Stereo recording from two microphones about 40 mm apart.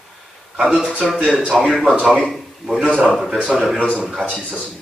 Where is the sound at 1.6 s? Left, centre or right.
Centre.